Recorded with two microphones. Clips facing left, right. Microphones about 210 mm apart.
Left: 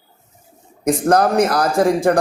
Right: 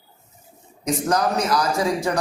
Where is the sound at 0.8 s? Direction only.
55° left (ahead or behind).